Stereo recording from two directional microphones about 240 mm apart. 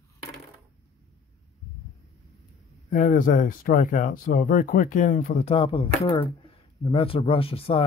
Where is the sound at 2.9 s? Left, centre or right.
Left.